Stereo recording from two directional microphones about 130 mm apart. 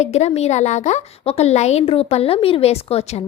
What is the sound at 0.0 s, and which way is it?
A woman's voice, 60° left (ahead or behind).